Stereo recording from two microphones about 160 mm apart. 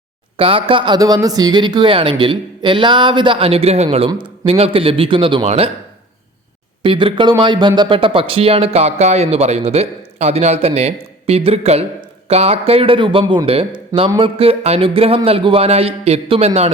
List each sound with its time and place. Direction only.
0.3 s a man's voice: 35° right (ahead or behind)
6.8 s a man's voice: 30° right (ahead or behind)